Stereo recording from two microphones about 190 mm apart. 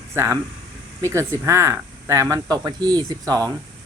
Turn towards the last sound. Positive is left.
turn(degrees=-20)  # may be behind; listen again after turning